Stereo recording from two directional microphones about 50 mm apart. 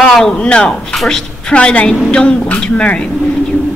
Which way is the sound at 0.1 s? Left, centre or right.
Centre.